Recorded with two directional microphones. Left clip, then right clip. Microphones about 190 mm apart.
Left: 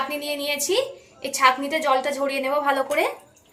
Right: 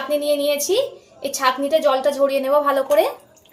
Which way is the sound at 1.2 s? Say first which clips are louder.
Left 1 dB; 25° left (ahead or behind).